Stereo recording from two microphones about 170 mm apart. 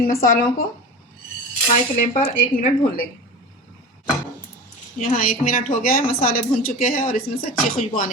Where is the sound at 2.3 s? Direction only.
60° left (ahead or behind).